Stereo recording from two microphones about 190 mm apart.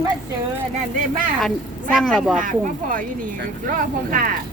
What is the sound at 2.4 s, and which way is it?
Speech, 45° right (ahead or behind).